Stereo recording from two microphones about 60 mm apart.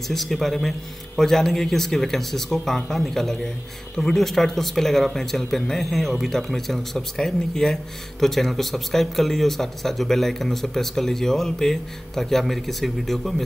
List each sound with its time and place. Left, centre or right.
0.1 s speech: centre